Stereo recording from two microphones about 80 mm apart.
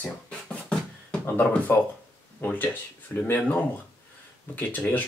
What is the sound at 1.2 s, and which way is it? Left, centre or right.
Speech, left.